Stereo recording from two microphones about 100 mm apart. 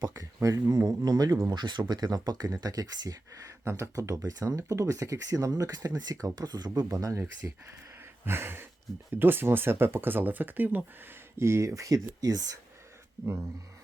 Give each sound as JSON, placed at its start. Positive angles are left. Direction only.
{"t": 0.0, "sound": "speech", "side_deg": -35}
{"t": 8.2, "sound": "speech", "side_deg": -25}